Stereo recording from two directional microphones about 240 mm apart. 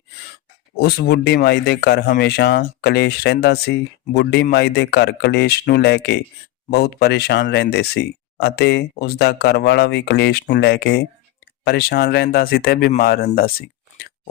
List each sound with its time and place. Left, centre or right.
0.8 s speech: left